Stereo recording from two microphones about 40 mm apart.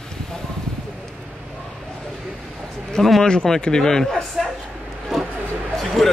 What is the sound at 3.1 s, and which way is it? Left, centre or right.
A man's voice, left.